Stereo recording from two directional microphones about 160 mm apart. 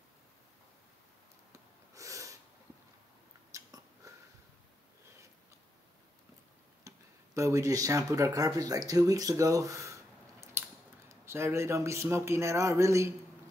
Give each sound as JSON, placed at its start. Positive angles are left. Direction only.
{"t": 2.0, "sound": "snort", "side_deg": -20}
{"t": 3.5, "sound": "a sound", "side_deg": -20}
{"t": 6.8, "sound": "tick-tock", "side_deg": -20}
{"t": 7.3, "sound": "speech", "side_deg": -20}
{"t": 11.1, "sound": "a man's voice", "side_deg": -15}